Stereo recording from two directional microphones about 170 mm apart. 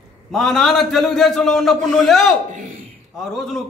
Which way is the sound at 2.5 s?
50° right (ahead or behind).